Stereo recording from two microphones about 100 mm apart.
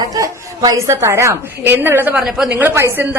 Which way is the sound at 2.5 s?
20° right (ahead or behind).